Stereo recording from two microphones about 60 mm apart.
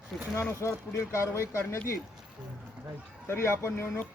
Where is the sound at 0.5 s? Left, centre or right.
Left.